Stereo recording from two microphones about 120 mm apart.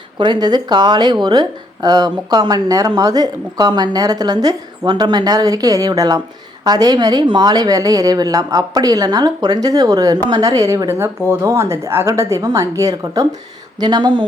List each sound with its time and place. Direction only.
0.2 s speech: 35° right (ahead or behind)